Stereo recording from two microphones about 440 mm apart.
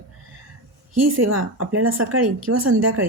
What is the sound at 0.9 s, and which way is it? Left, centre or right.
Speech, right.